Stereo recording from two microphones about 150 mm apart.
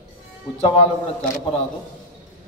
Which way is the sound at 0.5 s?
40° left (ahead or behind).